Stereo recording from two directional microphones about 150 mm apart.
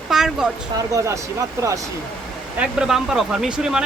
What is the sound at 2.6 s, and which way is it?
Speech, 5° right (ahead or behind).